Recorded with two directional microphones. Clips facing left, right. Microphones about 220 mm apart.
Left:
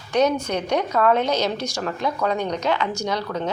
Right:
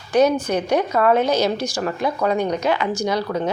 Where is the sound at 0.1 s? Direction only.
10° right (ahead or behind).